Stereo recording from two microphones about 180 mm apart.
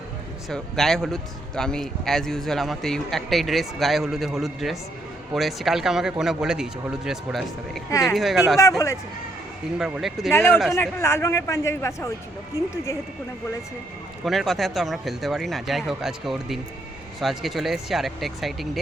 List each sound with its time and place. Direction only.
0.5 s speech: centre (ahead or behind)
7.9 s a man's voice: 15° left (ahead or behind)
8.1 s speech: centre (ahead or behind)
9.7 s speech: 5° right (ahead or behind)
10.3 s a man's voice: 10° left (ahead or behind)
14.3 s speech: centre (ahead or behind)